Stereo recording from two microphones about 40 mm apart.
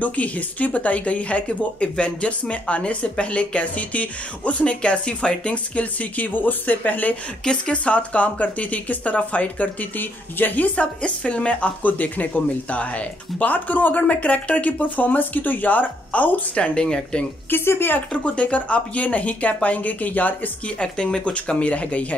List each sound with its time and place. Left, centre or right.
0.0 s speech: left
9.9 s speech: left
11.0 s speech: left
16.5 s speech: left
17.5 s speech: left
17.9 s speech: left
20.6 s speech: left